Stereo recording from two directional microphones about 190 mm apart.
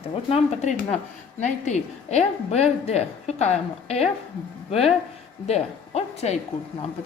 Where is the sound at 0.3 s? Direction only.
35° left (ahead or behind).